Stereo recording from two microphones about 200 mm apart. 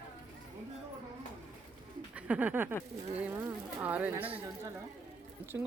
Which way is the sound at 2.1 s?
10° right (ahead or behind).